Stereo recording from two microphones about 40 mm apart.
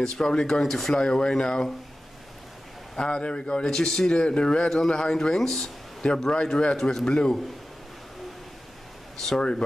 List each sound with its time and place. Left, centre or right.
0.0 s a man's voice: centre
0.9 s a man's voice: centre
3.0 s a man's voice: left
6.8 s a man's voice: centre
9.2 s a man's voice: centre